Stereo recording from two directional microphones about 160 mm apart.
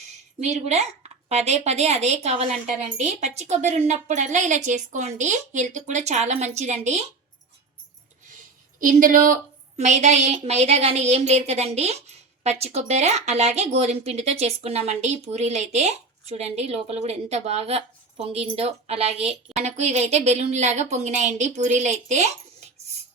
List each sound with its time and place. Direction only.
0.3 s a woman's voice: 45° right (ahead or behind)
8.8 s speech: 55° right (ahead or behind)
9.7 s a woman's voice: 45° right (ahead or behind)